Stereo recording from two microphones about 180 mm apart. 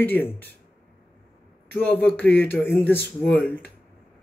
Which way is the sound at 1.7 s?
10° left (ahead or behind).